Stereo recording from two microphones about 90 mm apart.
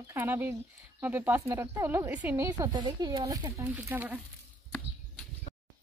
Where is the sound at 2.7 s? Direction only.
50° right (ahead or behind).